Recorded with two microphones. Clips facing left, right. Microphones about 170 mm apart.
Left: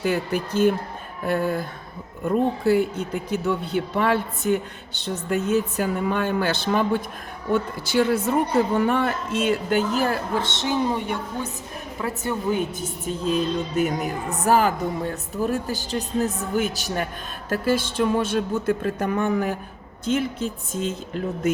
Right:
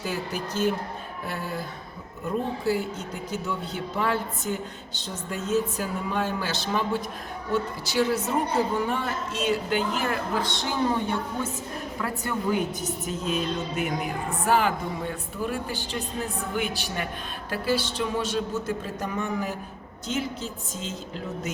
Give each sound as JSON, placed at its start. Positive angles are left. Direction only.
{"t": 0.0, "sound": "a woman's voice", "side_deg": 60}